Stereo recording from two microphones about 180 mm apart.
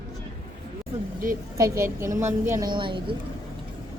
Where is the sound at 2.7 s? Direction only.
25° right (ahead or behind).